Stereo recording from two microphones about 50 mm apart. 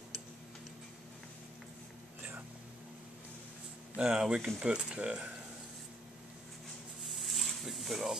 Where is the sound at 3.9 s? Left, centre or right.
Centre.